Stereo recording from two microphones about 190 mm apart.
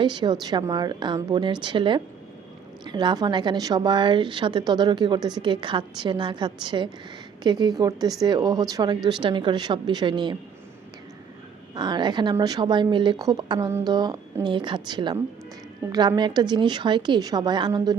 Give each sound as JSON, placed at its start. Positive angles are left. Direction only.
{"t": 0.0, "sound": "a woman's voice", "side_deg": -25}
{"t": 11.7, "sound": "a woman's voice", "side_deg": -20}